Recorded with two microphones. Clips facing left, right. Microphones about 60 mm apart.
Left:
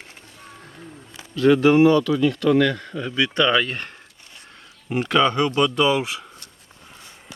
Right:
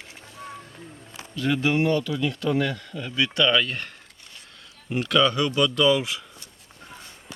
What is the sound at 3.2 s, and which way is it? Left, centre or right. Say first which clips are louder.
Speech: left 2 dB; left.